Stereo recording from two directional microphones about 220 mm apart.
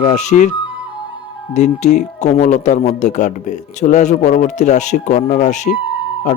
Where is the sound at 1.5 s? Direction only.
30° left (ahead or behind).